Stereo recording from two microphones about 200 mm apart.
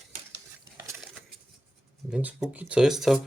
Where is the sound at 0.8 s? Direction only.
15° right (ahead or behind).